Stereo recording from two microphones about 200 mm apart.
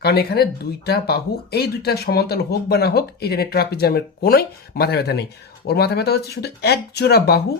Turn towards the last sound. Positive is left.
turn(degrees=50)  # may be behind; listen again after turning